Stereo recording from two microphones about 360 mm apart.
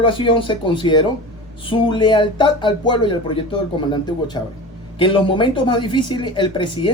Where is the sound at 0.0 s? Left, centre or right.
Centre.